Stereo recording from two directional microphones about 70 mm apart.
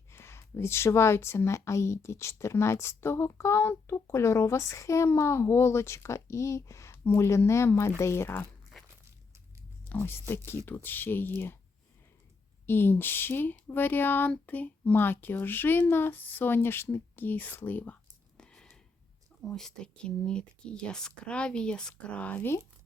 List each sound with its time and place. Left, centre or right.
0.1 s speech: left
9.9 s speech: left
12.6 s speech: left
18.3 s a sound: centre
19.4 s speech: centre